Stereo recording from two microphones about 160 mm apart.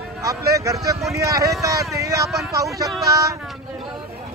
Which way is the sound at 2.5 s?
20° right (ahead or behind).